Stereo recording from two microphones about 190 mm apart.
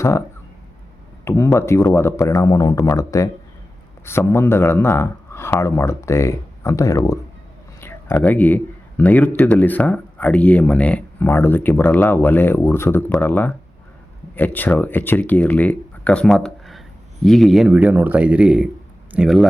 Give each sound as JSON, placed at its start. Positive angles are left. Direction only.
{"t": 1.2, "sound": "speech", "side_deg": 15}